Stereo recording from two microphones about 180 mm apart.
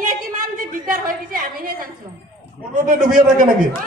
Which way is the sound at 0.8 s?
50° right (ahead or behind).